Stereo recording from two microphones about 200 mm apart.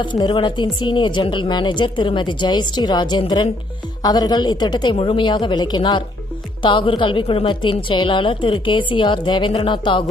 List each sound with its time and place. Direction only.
0.0 s speech: 25° left (ahead or behind)